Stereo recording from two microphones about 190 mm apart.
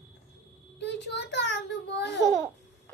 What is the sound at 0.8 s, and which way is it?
A child's voice, 65° left (ahead or behind).